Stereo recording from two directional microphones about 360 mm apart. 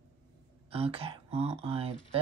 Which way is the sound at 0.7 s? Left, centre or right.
Centre.